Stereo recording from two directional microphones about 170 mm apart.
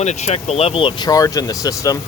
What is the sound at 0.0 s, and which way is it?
Speech, 40° left (ahead or behind).